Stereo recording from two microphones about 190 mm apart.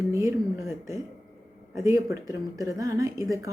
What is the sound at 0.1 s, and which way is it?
Speech, 15° right (ahead or behind).